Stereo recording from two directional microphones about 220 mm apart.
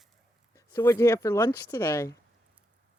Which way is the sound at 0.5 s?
15° left (ahead or behind).